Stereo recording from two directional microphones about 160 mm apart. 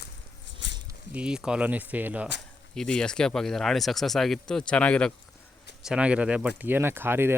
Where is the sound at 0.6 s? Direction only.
90° left.